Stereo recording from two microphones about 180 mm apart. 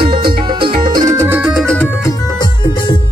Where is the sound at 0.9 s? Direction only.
15° right (ahead or behind); by 1.9 s 5° left (ahead or behind).